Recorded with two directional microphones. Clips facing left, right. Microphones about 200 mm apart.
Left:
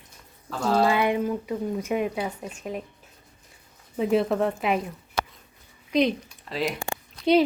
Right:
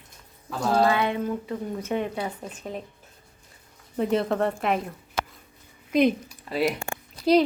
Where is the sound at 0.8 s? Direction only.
15° left (ahead or behind).